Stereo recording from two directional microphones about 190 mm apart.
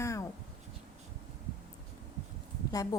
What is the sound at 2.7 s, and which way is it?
Speech, 20° left (ahead or behind).